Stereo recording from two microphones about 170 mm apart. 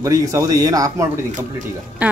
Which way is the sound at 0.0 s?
20° right (ahead or behind).